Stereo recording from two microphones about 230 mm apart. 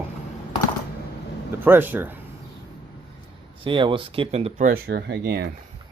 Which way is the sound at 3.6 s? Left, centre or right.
Right.